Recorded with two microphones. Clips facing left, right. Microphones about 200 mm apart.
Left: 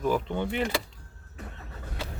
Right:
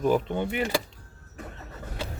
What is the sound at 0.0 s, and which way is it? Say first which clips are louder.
Speech: right 3 dB; 20° right (ahead or behind).